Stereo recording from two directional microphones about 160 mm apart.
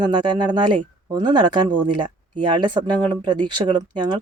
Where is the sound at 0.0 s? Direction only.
30° right (ahead or behind).